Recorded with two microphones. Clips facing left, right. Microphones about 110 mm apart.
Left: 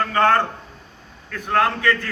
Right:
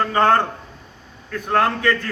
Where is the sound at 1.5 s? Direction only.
25° right (ahead or behind).